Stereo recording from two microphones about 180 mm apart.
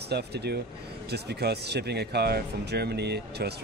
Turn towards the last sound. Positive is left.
turn(degrees=-65)  # may be behind; listen again after turning